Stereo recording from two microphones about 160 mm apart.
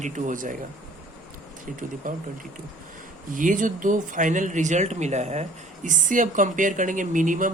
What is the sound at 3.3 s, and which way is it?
Speech, 55° right (ahead or behind).